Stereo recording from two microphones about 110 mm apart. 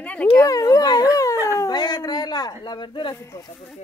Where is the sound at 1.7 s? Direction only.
40° left (ahead or behind).